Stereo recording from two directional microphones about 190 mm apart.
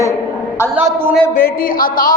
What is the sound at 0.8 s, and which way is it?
Speech, 10° right (ahead or behind).